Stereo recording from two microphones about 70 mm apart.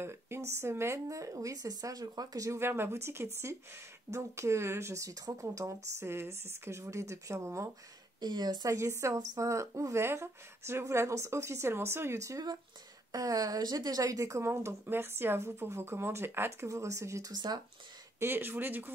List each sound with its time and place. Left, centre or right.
0.0 s speech: right
1.0 s speech: right
2.5 s speech: right
5.9 s speech: right
8.2 s speech: right
8.6 s speech: right
12.2 s speech: right
18.2 s speech: right